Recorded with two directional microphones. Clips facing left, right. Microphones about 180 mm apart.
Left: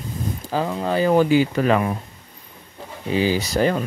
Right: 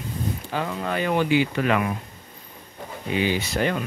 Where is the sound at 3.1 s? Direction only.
35° left (ahead or behind).